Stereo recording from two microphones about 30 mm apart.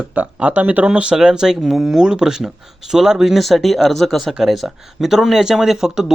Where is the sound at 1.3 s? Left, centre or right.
Right.